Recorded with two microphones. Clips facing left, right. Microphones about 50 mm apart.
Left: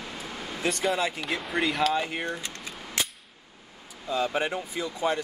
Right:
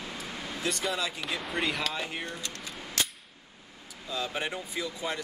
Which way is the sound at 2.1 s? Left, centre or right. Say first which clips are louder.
Left 5 dB; left.